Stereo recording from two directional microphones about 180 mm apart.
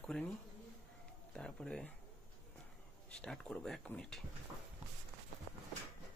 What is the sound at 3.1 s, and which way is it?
Speech, 5° left (ahead or behind).